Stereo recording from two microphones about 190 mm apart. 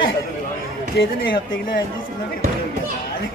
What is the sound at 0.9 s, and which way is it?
Speech, 50° left (ahead or behind).